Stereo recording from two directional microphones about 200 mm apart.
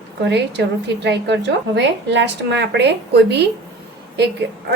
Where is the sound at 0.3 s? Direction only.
60° right (ahead or behind).